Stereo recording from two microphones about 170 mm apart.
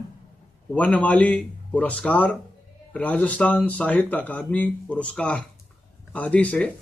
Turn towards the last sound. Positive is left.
turn(degrees=5)  # may be behind; listen again after turning